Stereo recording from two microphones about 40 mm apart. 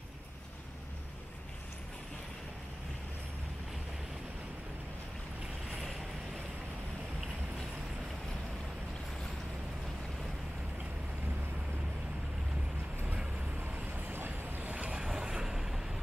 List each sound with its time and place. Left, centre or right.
5.8 s vehicle: centre
13.6 s vehicle: right
14.7 s vehicle: right
15.0 s vehicle: centre